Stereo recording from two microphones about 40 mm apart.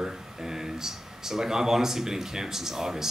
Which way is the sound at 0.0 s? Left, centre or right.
Centre.